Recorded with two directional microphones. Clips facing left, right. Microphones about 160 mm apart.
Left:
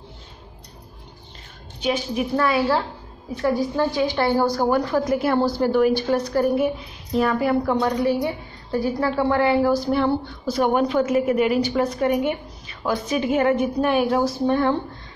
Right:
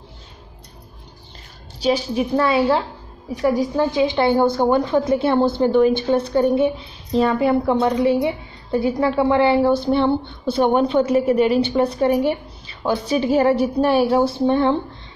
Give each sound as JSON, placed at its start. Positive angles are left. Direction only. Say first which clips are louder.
{"t": 1.8, "sound": "a woman's voice", "louder": "right 4 dB", "side_deg": -30}